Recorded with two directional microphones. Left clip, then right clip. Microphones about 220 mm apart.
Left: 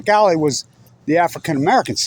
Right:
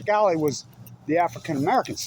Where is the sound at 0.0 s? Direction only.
50° left (ahead or behind).